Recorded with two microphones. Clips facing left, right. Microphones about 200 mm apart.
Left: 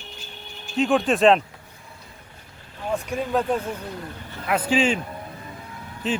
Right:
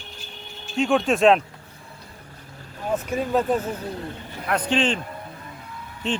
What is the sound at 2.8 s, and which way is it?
Speech, centre (ahead or behind).